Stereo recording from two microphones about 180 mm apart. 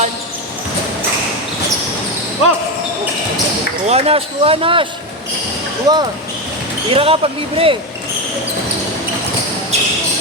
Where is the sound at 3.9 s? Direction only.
35° right (ahead or behind).